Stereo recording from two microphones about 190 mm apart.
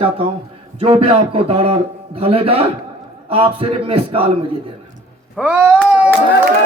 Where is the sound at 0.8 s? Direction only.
30° right (ahead or behind).